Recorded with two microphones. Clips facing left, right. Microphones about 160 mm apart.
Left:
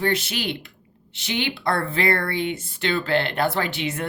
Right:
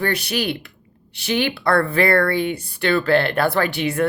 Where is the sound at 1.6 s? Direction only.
60° right (ahead or behind).